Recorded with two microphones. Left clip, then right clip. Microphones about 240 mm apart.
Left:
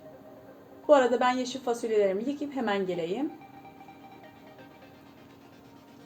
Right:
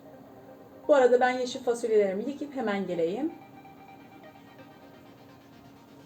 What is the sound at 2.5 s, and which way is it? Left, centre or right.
Speech, left.